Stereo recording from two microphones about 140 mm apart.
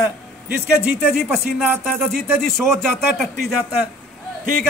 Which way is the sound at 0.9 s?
Centre (ahead or behind).